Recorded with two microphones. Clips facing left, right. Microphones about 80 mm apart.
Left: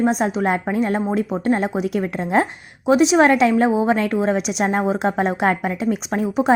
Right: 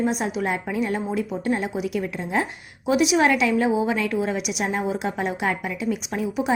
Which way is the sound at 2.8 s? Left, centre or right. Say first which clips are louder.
Left 5 dB; left.